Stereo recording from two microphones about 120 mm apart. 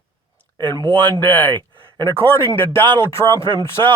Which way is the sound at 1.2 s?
15° left (ahead or behind).